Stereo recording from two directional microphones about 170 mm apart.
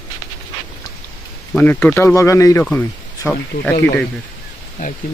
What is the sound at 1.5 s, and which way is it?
Speech, 10° left (ahead or behind).